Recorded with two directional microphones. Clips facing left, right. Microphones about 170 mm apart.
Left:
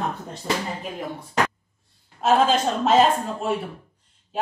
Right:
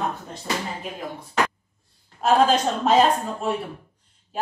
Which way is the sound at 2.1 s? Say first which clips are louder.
Even; centre (ahead or behind).